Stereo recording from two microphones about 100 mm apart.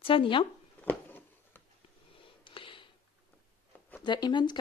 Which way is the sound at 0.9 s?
20° left (ahead or behind).